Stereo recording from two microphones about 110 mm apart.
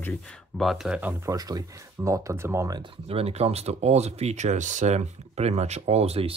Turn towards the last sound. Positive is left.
turn(degrees=-65)  # may be behind; listen again after turning